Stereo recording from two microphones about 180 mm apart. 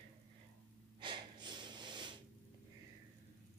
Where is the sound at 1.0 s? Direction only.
25° right (ahead or behind).